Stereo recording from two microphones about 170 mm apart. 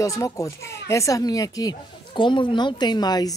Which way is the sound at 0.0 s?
20° left (ahead or behind).